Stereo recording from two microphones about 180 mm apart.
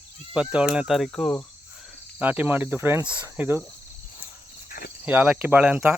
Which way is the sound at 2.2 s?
10° right (ahead or behind).